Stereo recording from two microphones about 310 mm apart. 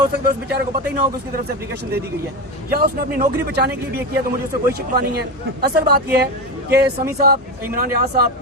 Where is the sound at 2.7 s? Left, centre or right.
Right.